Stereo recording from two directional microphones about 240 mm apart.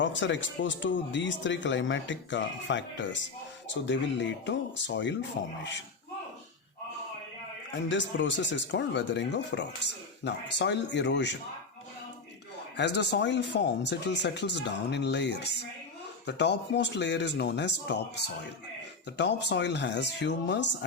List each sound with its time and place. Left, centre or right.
0.0 s speech: left
7.9 s speech: left
12.7 s speech: left